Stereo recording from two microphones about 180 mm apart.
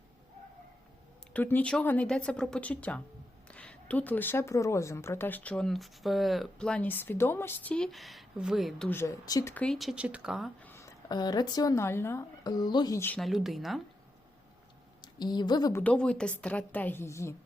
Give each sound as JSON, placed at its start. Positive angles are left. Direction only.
{"t": 1.3, "sound": "speech", "side_deg": 10}
{"t": 8.9, "sound": "speech", "side_deg": 15}
{"t": 10.6, "sound": "speech", "side_deg": 15}
{"t": 13.1, "sound": "speech", "side_deg": 0}
{"t": 15.0, "sound": "a woman's voice", "side_deg": 25}
{"t": 15.8, "sound": "speech", "side_deg": 5}